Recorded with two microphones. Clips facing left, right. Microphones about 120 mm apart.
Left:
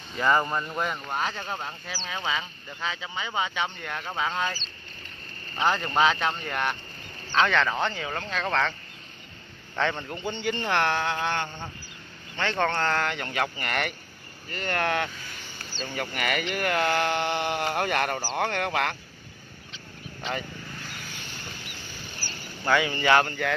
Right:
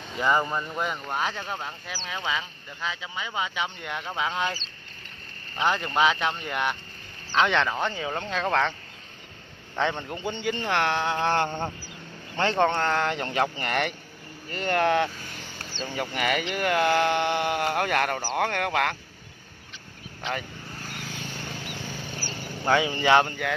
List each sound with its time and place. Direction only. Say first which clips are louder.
0.2 s speech: left 1 dB; 10° right (ahead or behind)
5.6 s speech: even; 5° right (ahead or behind)
9.8 s speech: right 1 dB; 15° right (ahead or behind)
11.1 s a sound: right 4 dB; 35° right (ahead or behind)
11.4 s a sound: right 8 dB; 55° right (ahead or behind)
12.4 s a sound: right 4 dB; 35° right (ahead or behind)
12.6 s speech: right 2 dB; 10° right (ahead or behind)
13.0 s speech: right 3 dB; 30° right (ahead or behind); by 18.9 s 5° right (ahead or behind)
22.7 s speech: right 1 dB; 20° right (ahead or behind)